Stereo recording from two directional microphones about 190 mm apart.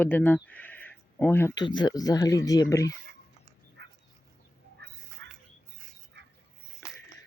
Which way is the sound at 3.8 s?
65° right (ahead or behind).